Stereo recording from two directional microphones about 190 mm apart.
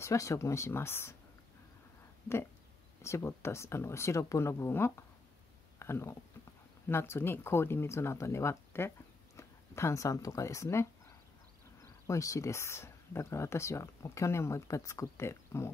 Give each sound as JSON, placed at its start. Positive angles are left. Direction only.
{"t": 0.0, "sound": "speech", "side_deg": 15}
{"t": 3.0, "sound": "speech", "side_deg": 15}
{"t": 12.1, "sound": "speech", "side_deg": 15}